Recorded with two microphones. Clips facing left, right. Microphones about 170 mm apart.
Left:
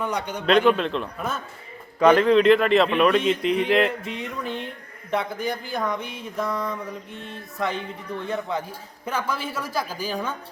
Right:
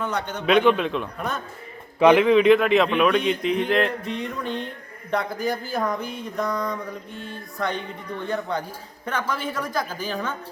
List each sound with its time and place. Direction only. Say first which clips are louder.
0.0 s a woman's voice: even; 15° left (ahead or behind)
0.8 s mantra: even; 5° right (ahead or behind)
9.0 s a woman's voice: even; 5° left (ahead or behind)